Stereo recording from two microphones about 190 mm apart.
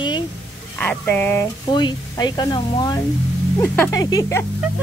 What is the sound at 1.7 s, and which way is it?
Speech, 25° left (ahead or behind).